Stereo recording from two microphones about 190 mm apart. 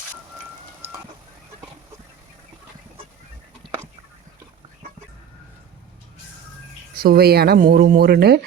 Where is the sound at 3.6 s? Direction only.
25° right (ahead or behind).